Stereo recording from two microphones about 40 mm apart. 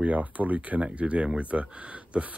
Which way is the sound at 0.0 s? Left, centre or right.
Right.